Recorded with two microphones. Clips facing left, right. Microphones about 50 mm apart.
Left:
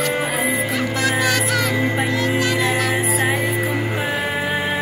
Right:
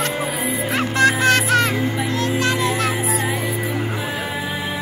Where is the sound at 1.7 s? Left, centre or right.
Left.